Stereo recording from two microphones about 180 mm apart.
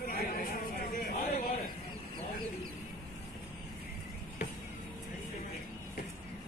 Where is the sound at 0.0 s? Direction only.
55° left (ahead or behind).